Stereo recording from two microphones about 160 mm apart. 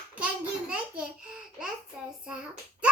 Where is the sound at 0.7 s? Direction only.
5° right (ahead or behind).